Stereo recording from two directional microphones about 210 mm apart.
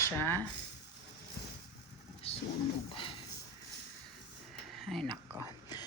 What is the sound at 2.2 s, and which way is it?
Wild animals, 30° left (ahead or behind).